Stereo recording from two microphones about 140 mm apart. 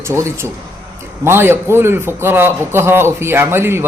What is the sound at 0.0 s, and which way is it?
A man's voice, 20° right (ahead or behind).